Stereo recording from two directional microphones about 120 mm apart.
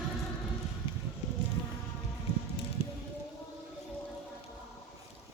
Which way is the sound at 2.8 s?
50° left (ahead or behind).